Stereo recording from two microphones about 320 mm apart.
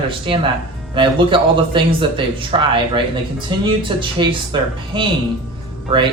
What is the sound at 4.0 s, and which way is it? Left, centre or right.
Speech, centre.